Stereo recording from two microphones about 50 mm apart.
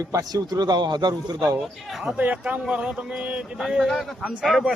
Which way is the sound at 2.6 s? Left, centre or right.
Centre.